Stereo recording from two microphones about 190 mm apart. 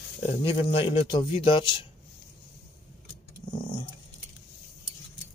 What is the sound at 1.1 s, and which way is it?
Speech, 25° left (ahead or behind).